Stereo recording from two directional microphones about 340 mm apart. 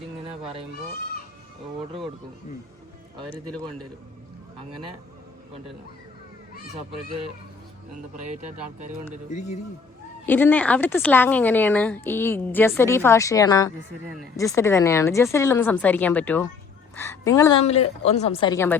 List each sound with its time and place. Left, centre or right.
3.2 s a woman's voice: centre
10.2 s a woman's voice: centre